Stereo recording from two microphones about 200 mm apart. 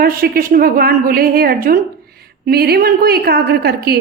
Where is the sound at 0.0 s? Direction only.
45° right (ahead or behind).